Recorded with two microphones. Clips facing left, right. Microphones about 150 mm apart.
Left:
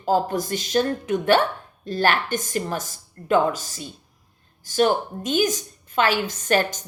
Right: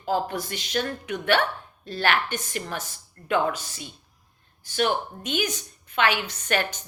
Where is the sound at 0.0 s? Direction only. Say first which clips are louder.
Left 5 dB; 40° left (ahead or behind).